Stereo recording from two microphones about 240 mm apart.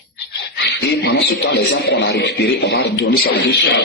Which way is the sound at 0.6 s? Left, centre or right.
Left.